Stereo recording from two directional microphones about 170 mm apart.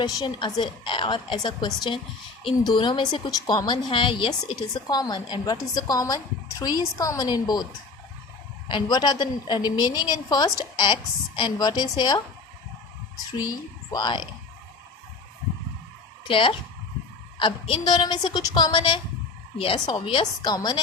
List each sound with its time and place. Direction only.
0.0 s a woman's voice: 25° left (ahead or behind)
8.7 s a woman's voice: 25° left (ahead or behind)
13.9 s a woman's voice: 25° left (ahead or behind)
16.2 s a woman's voice: 30° left (ahead or behind)